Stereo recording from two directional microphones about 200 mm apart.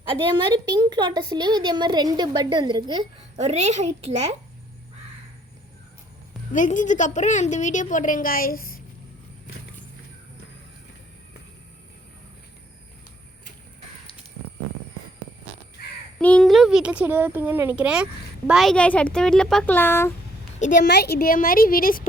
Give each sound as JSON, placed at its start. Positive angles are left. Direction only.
{"t": 0.1, "sound": "a woman's voice", "side_deg": -25}
{"t": 3.4, "sound": "a woman's voice", "side_deg": -35}
{"t": 6.5, "sound": "a woman's voice", "side_deg": 40}
{"t": 16.1, "sound": "a child's voice", "side_deg": 5}
{"t": 20.8, "sound": "a woman's voice", "side_deg": 55}